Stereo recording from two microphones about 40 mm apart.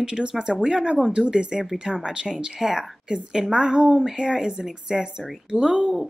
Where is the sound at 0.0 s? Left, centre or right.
Right.